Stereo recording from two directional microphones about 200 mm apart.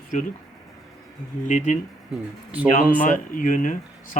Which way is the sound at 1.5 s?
40° left (ahead or behind).